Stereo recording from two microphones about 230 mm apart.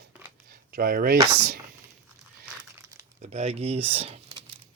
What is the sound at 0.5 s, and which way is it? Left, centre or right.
Speech, right.